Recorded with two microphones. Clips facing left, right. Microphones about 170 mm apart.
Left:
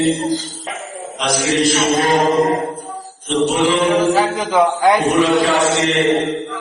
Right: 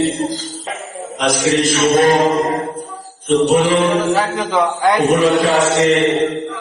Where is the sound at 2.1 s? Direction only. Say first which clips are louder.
Even; centre (ahead or behind).